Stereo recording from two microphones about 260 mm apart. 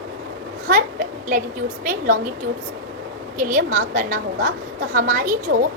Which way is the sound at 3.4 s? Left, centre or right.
Right.